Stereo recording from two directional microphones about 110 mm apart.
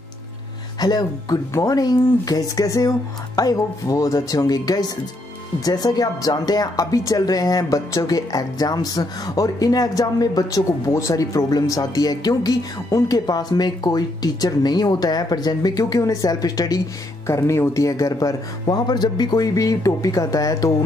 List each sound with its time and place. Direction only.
0.7 s speech: 35° left (ahead or behind)